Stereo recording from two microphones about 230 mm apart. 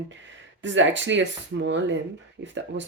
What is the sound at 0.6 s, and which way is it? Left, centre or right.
Speech, right.